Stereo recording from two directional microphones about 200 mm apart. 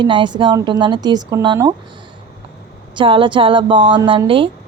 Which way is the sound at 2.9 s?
25° right (ahead or behind).